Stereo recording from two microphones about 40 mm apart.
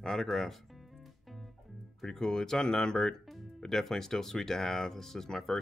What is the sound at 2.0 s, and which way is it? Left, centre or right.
Speech, centre.